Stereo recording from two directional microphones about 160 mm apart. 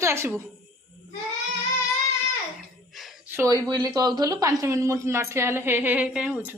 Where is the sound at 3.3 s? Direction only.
20° right (ahead or behind).